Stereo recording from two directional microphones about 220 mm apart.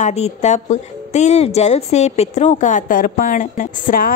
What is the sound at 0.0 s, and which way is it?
A woman's voice, 30° left (ahead or behind).